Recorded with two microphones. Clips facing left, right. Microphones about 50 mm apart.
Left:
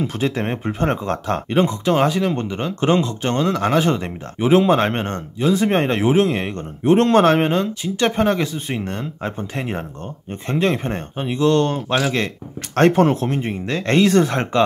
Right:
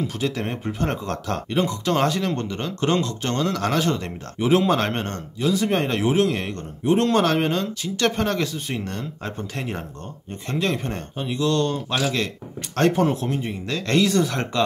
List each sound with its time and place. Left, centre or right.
0.0 s speech: left
6.8 s speech: left